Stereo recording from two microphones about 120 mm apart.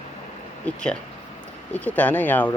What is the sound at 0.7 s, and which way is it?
Speech, 10° left (ahead or behind).